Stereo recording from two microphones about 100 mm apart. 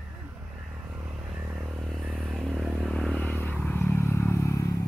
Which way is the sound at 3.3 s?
20° left (ahead or behind).